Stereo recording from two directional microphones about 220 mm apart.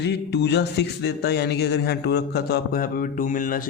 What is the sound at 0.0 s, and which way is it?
Speech, 50° left (ahead or behind).